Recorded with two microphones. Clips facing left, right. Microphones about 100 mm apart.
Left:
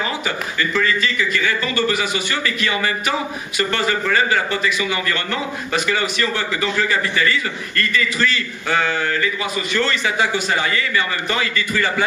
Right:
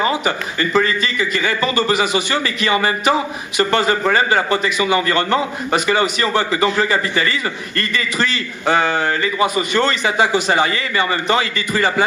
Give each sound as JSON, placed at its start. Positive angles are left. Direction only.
{"t": 0.0, "sound": "a man's voice", "side_deg": -25}